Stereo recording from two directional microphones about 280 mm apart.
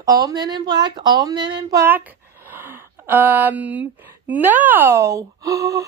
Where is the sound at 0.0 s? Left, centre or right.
Centre.